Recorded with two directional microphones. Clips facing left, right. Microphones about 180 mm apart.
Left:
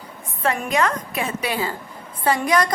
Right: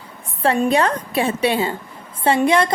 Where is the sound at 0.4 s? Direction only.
30° right (ahead or behind).